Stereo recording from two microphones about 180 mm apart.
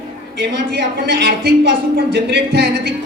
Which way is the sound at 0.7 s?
70° right (ahead or behind).